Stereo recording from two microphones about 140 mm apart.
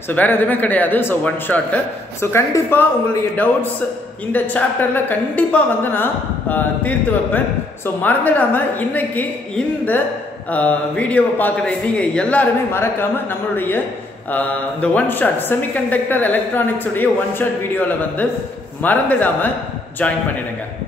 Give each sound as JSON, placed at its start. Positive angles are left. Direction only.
{"t": 0.1, "sound": "speech", "side_deg": 15}
{"t": 4.3, "sound": "speech", "side_deg": 10}
{"t": 10.5, "sound": "speech", "side_deg": 10}